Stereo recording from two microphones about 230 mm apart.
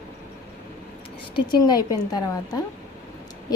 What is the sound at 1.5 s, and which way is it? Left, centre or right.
A woman's voice, centre.